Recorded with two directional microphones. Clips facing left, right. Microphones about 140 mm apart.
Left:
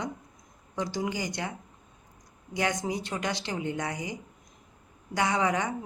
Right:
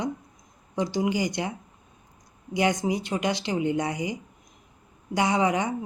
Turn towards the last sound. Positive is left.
turn(degrees=-15)  # may be behind; listen again after turning